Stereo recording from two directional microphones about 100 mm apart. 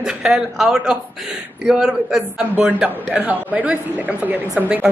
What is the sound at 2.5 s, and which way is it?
Speech, 15° right (ahead or behind).